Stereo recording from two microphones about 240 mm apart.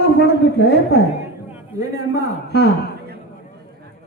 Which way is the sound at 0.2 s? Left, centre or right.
Left.